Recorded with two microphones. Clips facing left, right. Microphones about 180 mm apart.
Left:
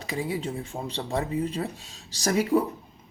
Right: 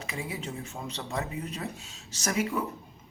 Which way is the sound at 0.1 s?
35° left (ahead or behind).